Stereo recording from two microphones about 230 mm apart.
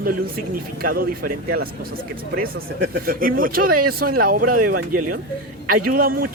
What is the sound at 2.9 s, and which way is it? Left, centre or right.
Speech, right.